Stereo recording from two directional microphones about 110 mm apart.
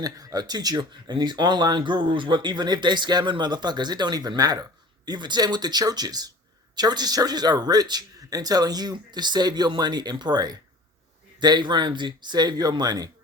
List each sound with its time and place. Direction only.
0.0 s speech: 35° right (ahead or behind)